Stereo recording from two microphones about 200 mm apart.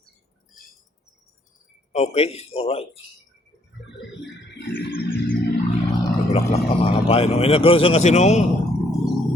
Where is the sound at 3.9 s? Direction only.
65° left (ahead or behind).